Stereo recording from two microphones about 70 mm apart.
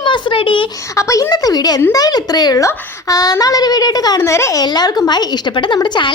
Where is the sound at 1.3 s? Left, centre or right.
Left.